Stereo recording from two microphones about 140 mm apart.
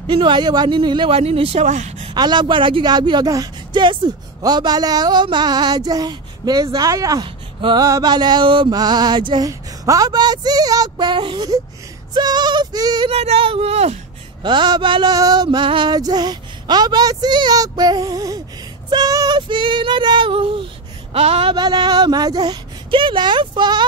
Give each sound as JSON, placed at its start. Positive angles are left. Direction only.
{"t": 0.0, "sound": "speech", "side_deg": -35}
{"t": 2.1, "sound": "speech", "side_deg": -30}
{"t": 13.1, "sound": "speech", "side_deg": -45}
{"t": 14.4, "sound": "speech", "side_deg": -35}
{"t": 18.9, "sound": "child singing", "side_deg": -30}
{"t": 21.1, "sound": "speech", "side_deg": -45}